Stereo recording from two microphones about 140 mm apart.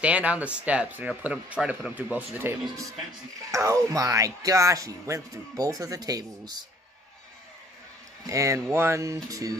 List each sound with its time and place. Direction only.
0.0 s speech: 10° right (ahead or behind)
3.5 s speech: 25° right (ahead or behind)
8.3 s speech: 20° right (ahead or behind)